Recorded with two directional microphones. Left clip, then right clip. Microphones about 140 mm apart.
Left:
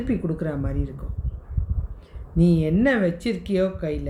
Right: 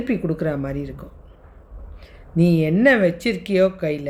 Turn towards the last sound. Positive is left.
turn(degrees=-50)  # may be behind; listen again after turning